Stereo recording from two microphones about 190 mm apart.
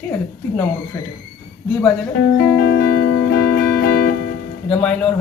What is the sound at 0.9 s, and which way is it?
Speech, 20° left (ahead or behind).